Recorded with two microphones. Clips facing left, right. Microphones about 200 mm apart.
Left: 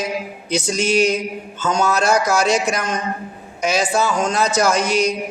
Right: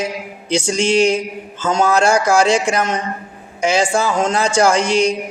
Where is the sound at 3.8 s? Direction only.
25° right (ahead or behind).